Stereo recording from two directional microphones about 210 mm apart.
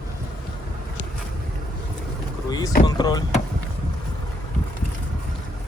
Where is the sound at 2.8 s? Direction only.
20° left (ahead or behind).